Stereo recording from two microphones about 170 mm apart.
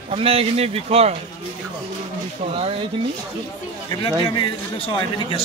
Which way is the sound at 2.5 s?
35° right (ahead or behind).